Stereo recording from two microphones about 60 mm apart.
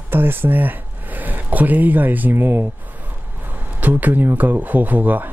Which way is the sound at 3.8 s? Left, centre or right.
Right.